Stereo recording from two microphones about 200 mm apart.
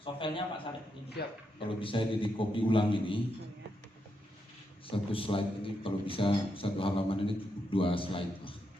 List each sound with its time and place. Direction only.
0.0 s a man's voice: 25° left (ahead or behind)
1.2 s a man's voice: 55° left (ahead or behind)
1.5 s a man's voice: 25° left (ahead or behind)
4.9 s a man's voice: 25° left (ahead or behind)